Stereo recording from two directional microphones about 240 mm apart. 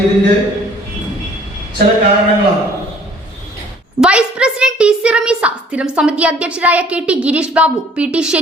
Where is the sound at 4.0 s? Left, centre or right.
Centre.